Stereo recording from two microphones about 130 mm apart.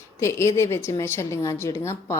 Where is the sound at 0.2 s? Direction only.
20° left (ahead or behind).